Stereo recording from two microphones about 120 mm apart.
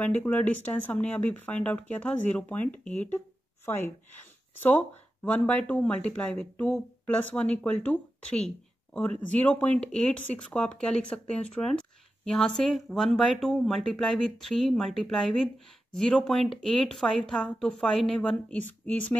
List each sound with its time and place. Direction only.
0.0 s a woman's voice: 15° left (ahead or behind)